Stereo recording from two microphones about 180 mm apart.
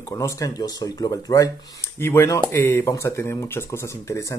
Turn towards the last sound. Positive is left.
turn(degrees=15)  # may be behind; listen again after turning